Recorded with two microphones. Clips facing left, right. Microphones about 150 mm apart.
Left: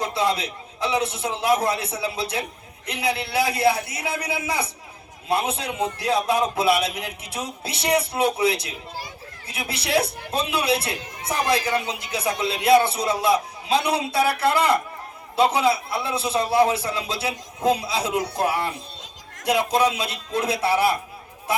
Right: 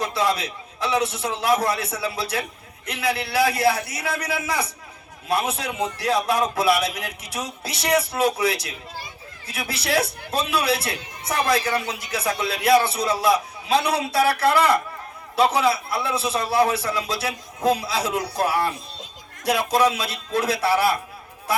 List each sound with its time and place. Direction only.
0.0 s a man's voice: 25° left (ahead or behind)
9.5 s a man's voice: 25° left (ahead or behind)